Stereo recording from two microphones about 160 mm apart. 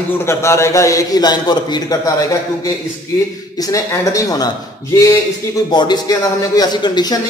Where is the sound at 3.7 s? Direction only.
20° left (ahead or behind).